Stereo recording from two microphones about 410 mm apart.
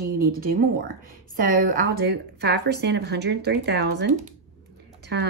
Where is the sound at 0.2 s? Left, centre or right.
Right.